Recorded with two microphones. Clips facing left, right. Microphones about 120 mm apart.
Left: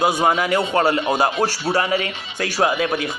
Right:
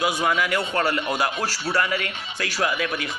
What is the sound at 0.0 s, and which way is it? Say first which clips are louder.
Speech: left 5 dB; 30° left (ahead or behind).